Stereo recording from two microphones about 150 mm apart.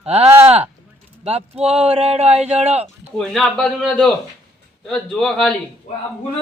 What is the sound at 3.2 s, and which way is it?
A man's voice, centre (ahead or behind).